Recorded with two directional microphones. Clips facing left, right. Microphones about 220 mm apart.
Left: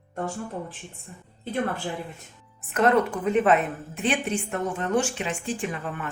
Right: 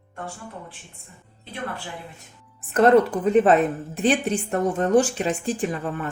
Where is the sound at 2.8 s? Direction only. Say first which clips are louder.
Right 5 dB; 35° right (ahead or behind).